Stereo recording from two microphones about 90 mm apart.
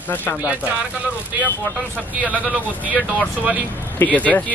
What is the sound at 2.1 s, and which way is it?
Speech, 15° right (ahead or behind).